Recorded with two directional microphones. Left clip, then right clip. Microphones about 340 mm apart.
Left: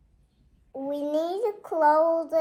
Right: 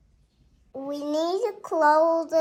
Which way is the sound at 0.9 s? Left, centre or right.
Right.